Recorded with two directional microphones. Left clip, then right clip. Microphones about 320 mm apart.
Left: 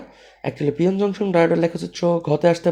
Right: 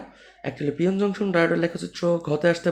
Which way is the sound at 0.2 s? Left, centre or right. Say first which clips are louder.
Left 5 dB; centre.